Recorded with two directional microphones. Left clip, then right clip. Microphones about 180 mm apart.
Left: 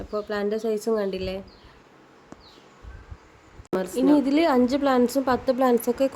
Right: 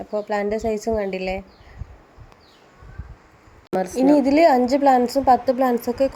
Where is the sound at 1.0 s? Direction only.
40° left (ahead or behind).